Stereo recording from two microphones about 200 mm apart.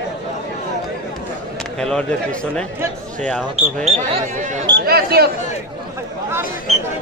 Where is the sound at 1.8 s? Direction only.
5° left (ahead or behind).